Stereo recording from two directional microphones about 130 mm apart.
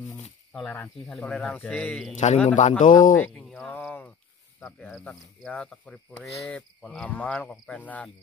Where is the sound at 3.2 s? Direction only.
5° left (ahead or behind).